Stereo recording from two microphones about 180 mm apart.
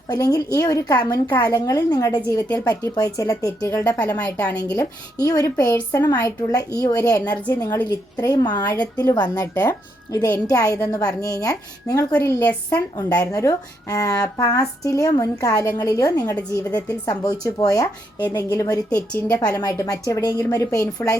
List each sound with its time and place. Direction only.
0.1 s a woman's voice: 20° left (ahead or behind)
4.4 s a woman's voice: 20° left (ahead or behind)